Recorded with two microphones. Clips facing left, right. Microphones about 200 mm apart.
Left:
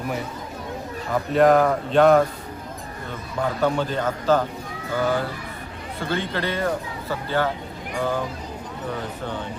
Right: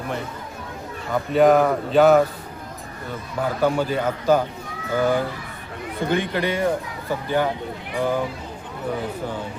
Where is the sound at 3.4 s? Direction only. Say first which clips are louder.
Right 1 dB; 10° right (ahead or behind).